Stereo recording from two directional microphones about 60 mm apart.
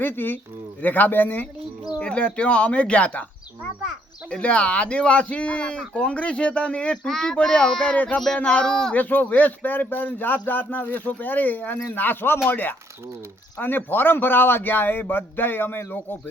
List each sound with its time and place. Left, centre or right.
0.0 s a man's voice: left
2.0 s speech: centre
4.3 s speech: centre
8.9 s a man's voice: left